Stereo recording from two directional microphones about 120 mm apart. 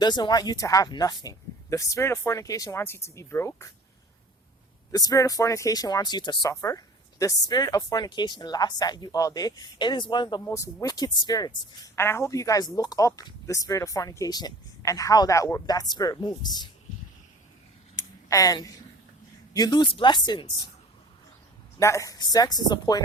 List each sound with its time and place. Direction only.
0.0 s a woman's voice: 35° left (ahead or behind)
4.9 s speech: 30° left (ahead or behind)
6.5 s speech: 25° left (ahead or behind)
10.4 s speech: 25° left (ahead or behind)
11.9 s a woman's voice: 20° left (ahead or behind)
17.9 s a sound: 30° left (ahead or behind)
19.5 s speech: 35° left (ahead or behind)
21.8 s speech: 25° left (ahead or behind)